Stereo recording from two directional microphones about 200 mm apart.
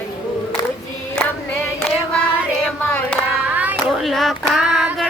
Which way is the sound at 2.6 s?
5° left (ahead or behind).